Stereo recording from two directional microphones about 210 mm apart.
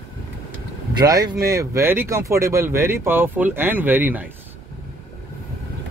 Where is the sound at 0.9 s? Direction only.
20° right (ahead or behind).